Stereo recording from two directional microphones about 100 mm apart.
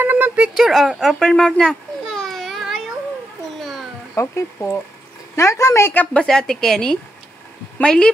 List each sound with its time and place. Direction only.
0.0 s a sound: 20° right (ahead or behind)
0.6 s babbling: centre (ahead or behind)
4.1 s a woman's voice: 30° left (ahead or behind)
6.1 s a woman's voice: 5° left (ahead or behind)